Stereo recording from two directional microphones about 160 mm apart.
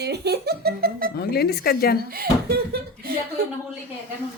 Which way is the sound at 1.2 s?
80° left.